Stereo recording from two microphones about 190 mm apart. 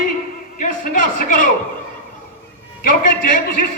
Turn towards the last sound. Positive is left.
turn(degrees=45)  # may be behind; listen again after turning